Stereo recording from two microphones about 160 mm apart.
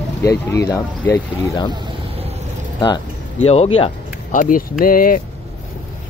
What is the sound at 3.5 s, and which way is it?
Speech, 40° left (ahead or behind).